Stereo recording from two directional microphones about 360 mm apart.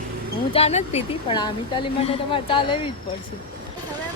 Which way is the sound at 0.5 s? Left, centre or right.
Centre.